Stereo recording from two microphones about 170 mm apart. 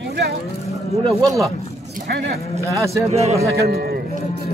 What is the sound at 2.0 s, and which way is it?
Speech, 75° right (ahead or behind).